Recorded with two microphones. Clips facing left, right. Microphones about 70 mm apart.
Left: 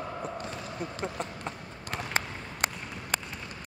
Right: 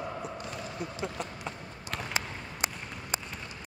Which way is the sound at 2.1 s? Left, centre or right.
Left.